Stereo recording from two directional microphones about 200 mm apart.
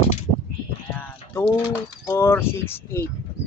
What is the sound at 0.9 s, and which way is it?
Speech, 10° left (ahead or behind).